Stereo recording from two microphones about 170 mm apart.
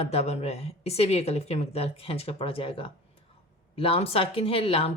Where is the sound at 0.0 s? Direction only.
40° left (ahead or behind).